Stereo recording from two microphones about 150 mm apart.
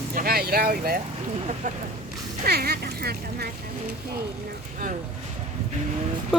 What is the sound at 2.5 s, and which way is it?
Speech, 90° right.